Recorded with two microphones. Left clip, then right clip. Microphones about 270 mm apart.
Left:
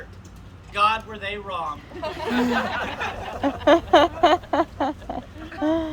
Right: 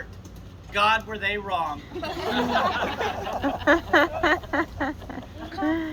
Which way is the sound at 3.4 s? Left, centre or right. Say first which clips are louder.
Left 4 dB; left.